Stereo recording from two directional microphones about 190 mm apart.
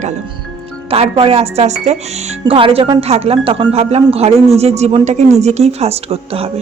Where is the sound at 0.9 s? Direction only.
30° right (ahead or behind).